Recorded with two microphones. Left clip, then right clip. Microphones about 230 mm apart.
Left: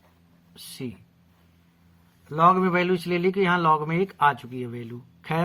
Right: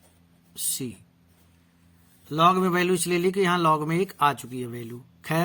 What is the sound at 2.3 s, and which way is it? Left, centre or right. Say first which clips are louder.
Speech: left 1 dB; right.